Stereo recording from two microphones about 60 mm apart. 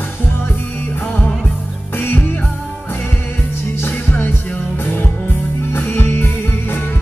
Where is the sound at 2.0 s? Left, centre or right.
Left.